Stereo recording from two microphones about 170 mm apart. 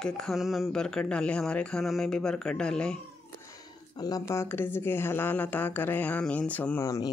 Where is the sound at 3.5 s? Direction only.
25° left (ahead or behind).